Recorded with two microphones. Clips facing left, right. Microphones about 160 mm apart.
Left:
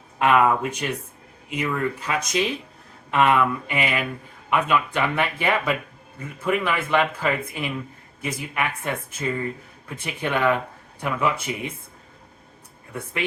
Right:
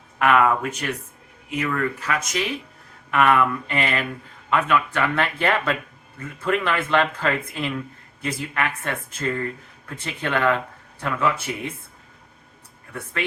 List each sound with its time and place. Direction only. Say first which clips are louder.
0.2 s speech: even; 20° left (ahead or behind)